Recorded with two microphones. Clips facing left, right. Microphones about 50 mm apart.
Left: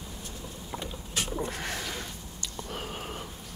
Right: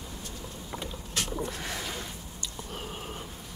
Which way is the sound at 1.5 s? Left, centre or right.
Left.